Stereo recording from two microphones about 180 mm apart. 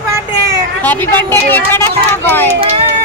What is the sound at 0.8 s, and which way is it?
Speech, 10° left (ahead or behind).